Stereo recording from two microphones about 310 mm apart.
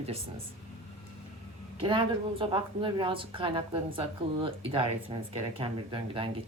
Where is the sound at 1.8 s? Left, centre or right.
Centre.